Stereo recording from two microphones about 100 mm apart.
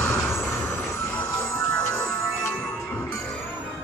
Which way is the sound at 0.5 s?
25° left (ahead or behind).